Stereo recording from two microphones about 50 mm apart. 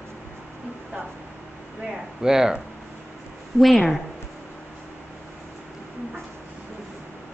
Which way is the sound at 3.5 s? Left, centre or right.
Centre.